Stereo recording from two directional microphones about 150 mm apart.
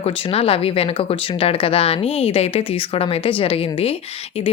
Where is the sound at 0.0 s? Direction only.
40° left (ahead or behind).